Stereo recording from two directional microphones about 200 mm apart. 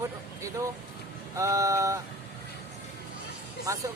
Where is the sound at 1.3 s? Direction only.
15° right (ahead or behind).